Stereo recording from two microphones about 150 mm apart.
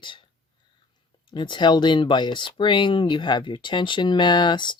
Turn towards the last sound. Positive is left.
turn(degrees=30)  # may be behind; listen again after turning